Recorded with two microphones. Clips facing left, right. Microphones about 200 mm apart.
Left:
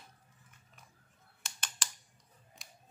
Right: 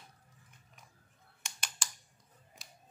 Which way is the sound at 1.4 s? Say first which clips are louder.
Even; 10° right (ahead or behind).